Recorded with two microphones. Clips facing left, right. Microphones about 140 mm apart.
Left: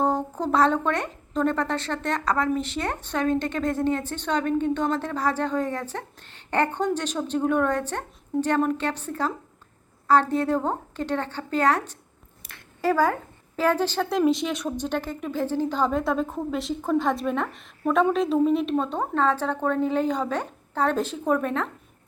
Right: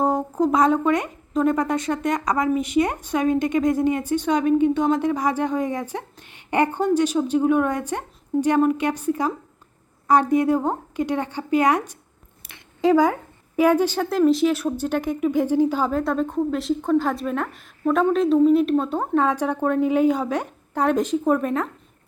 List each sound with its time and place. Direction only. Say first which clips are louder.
0.0 s a woman's voice: right 4 dB; 10° right (ahead or behind)